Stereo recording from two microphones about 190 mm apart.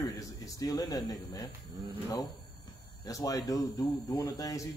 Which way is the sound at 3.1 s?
15° left (ahead or behind).